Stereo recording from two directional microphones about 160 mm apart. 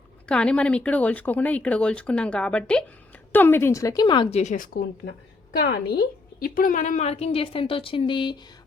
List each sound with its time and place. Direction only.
0.3 s a woman's voice: 5° left (ahead or behind); by 4.3 s 25° left (ahead or behind)
4.3 s speech: 45° left (ahead or behind); by 5.1 s 80° left
5.6 s a woman's voice: 90° left
6.4 s speech: 60° left (ahead or behind); by 8.4 s 30° left (ahead or behind)